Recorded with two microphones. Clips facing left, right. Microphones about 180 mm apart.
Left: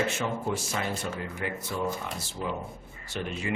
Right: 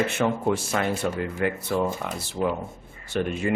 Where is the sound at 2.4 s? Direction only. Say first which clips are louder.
Right 8 dB; 70° right (ahead or behind).